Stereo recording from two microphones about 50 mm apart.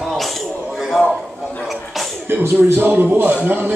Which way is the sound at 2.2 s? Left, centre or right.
Right.